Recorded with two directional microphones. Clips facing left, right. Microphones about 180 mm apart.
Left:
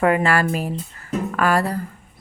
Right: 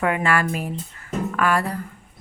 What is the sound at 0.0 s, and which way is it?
Speech, 35° left (ahead or behind).